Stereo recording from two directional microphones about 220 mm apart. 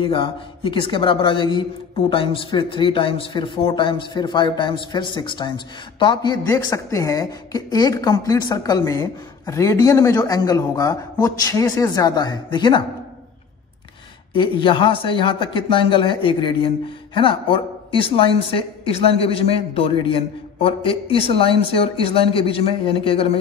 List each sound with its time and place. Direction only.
0.0 s a man's voice: 25° left (ahead or behind)
14.3 s a man's voice: 20° left (ahead or behind)